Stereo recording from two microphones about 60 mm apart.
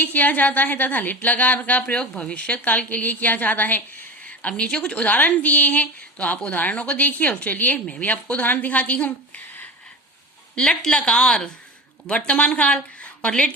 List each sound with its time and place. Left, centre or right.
0.0 s a woman's voice: left
4.4 s a woman's voice: centre
10.5 s a woman's voice: centre
13.0 s a sound: centre